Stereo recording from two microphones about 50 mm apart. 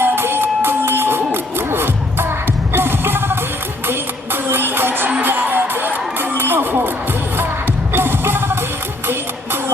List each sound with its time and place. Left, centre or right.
0.0 s music: right
7.9 s music: right